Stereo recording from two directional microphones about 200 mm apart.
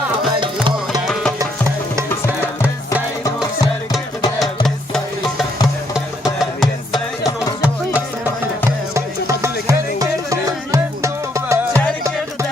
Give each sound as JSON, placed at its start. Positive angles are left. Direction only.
{"t": 0.3, "sound": "music", "side_deg": -25}
{"t": 5.9, "sound": "music", "side_deg": 0}
{"t": 9.0, "sound": "music", "side_deg": -15}